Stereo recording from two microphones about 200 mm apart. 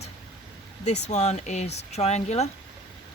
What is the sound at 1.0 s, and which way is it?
Speech, 35° left (ahead or behind).